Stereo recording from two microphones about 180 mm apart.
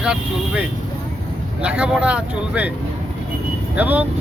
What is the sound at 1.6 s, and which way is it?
Speech, 5° right (ahead or behind).